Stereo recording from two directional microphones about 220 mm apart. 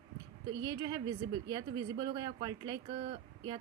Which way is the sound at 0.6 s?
20° right (ahead or behind).